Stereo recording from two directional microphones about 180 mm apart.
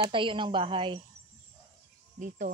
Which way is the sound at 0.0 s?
30° right (ahead or behind).